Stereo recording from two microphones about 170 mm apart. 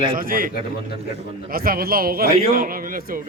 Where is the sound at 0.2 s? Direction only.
55° right (ahead or behind).